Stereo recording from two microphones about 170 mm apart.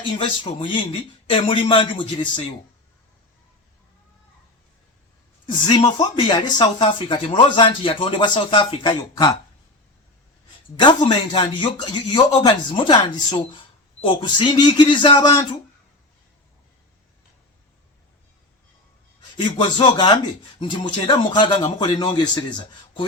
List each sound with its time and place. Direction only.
0.0 s a man's voice: 30° left (ahead or behind)
5.5 s speech: 25° left (ahead or behind)
10.8 s speech: 30° left (ahead or behind)
19.9 s speech: 25° left (ahead or behind)